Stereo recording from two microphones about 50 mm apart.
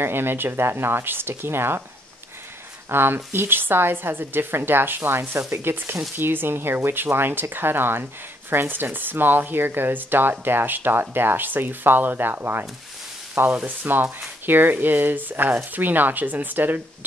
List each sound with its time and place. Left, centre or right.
0.0 s speech: right
2.9 s speech: right
13.5 s speech: right